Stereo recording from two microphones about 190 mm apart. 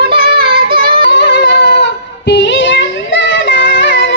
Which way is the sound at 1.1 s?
65° left (ahead or behind).